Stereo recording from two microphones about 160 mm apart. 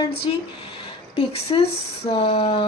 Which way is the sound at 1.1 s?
35° left (ahead or behind).